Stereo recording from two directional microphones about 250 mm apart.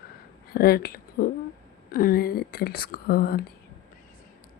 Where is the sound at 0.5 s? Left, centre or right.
Left.